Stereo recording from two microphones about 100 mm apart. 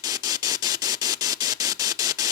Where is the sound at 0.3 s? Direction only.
40° right (ahead or behind).